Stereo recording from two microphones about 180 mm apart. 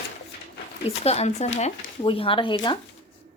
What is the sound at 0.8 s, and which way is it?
A woman's voice, 35° left (ahead or behind).